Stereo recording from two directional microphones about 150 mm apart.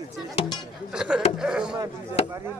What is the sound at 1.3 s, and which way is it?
Speech, 5° right (ahead or behind).